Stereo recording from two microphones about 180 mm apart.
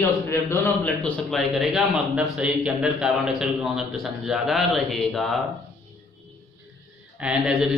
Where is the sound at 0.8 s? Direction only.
Centre (ahead or behind).